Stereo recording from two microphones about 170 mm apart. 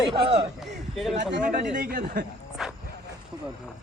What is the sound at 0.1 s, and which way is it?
Speech, 30° right (ahead or behind).